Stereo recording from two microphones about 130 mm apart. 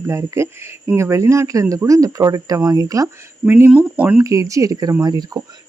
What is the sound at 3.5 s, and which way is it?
Speech, 15° right (ahead or behind).